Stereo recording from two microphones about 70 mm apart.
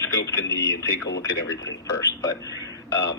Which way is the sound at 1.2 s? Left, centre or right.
Left.